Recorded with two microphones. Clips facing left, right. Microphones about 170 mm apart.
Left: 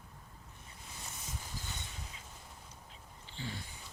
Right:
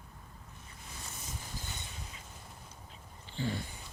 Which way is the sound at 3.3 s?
55° right (ahead or behind).